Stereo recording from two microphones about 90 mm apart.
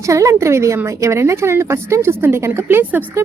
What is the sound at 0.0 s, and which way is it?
A woman's voice, 35° right (ahead or behind).